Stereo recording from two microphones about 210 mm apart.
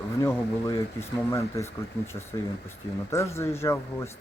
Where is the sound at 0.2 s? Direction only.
15° left (ahead or behind).